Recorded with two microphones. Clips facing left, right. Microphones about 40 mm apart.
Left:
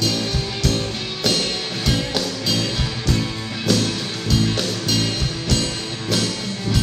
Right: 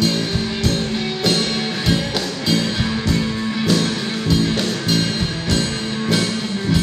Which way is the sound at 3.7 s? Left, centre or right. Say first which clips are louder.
Left 1 dB; right.